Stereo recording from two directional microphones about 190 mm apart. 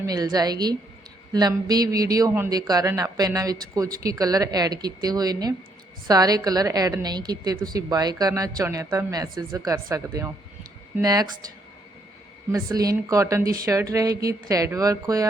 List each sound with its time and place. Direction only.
0.0 s speech: 20° right (ahead or behind)
12.5 s speech: 15° right (ahead or behind)